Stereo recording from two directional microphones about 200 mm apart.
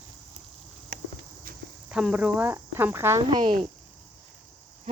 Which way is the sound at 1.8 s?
5° right (ahead or behind).